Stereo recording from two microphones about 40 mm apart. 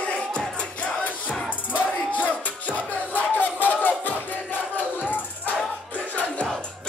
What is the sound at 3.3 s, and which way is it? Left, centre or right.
Crowd, left.